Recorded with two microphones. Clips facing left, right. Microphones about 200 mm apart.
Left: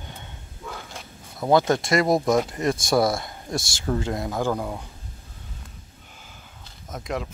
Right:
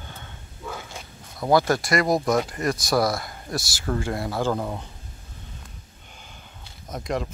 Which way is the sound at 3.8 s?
15° left (ahead or behind).